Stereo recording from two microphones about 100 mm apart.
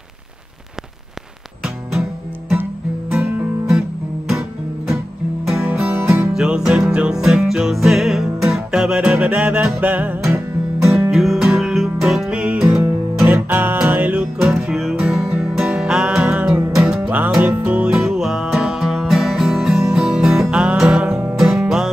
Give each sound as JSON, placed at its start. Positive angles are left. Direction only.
{"t": 1.6, "sound": "music", "side_deg": -5}
{"t": 3.1, "sound": "music", "side_deg": -5}
{"t": 5.9, "sound": "music", "side_deg": -25}
{"t": 6.3, "sound": "music", "side_deg": -5}
{"t": 10.2, "sound": "music", "side_deg": -30}
{"t": 10.9, "sound": "music", "side_deg": -5}
{"t": 12.6, "sound": "music", "side_deg": -25}
{"t": 14.4, "sound": "music", "side_deg": -5}
{"t": 17.8, "sound": "music", "side_deg": -5}